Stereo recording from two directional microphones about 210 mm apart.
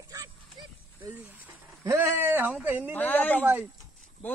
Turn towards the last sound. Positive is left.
turn(degrees=-10)  # may be behind; listen again after turning